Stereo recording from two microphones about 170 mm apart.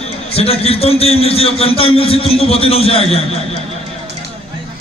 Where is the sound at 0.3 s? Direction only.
35° left (ahead or behind).